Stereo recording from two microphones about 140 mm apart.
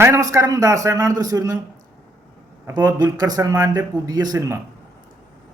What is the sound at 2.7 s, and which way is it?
Speech, 30° right (ahead or behind).